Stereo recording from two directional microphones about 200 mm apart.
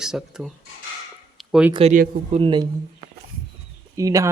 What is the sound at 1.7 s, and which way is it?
Speech, 30° right (ahead or behind).